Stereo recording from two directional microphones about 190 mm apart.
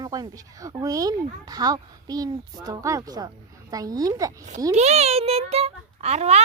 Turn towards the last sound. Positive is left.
turn(degrees=-35)  # may be behind; listen again after turning